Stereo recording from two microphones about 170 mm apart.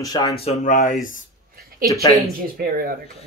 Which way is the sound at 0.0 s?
20° left (ahead or behind).